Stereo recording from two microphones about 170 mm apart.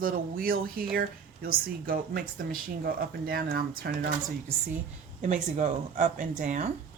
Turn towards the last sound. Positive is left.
turn(degrees=-45)  # may be behind; listen again after turning